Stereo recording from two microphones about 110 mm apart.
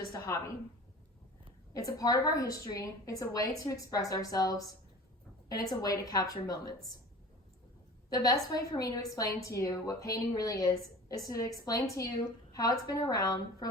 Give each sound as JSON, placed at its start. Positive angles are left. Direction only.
{"t": 0.1, "sound": "a woman's voice", "side_deg": 25}
{"t": 1.7, "sound": "a woman's voice", "side_deg": 30}
{"t": 8.1, "sound": "a woman's voice", "side_deg": 35}